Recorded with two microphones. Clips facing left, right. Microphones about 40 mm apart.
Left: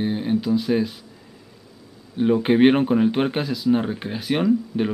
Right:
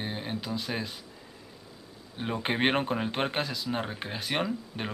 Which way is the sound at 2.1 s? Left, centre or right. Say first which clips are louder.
Left 12 dB; centre.